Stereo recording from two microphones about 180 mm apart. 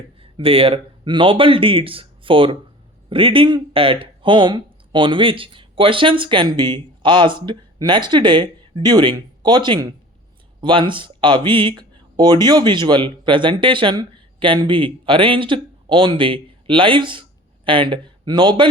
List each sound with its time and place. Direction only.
0.2 s speech: 30° right (ahead or behind)